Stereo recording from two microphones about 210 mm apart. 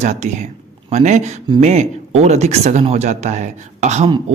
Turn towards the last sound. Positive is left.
turn(degrees=-30)  # may be behind; listen again after turning